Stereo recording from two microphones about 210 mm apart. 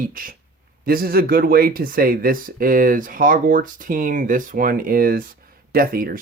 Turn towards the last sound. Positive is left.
turn(degrees=-45)  # may be behind; listen again after turning